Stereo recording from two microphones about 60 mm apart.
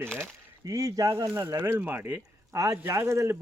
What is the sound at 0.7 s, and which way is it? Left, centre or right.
A man's voice, right.